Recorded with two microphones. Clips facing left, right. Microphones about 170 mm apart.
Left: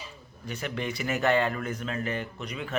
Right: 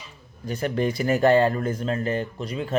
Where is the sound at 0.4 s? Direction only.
40° right (ahead or behind).